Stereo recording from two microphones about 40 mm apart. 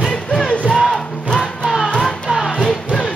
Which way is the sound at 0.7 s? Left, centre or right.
Centre.